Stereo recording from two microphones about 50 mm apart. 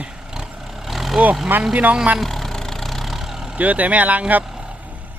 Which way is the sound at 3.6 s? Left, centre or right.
Right.